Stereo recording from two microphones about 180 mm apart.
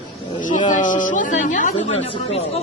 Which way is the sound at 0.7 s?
45° left (ahead or behind).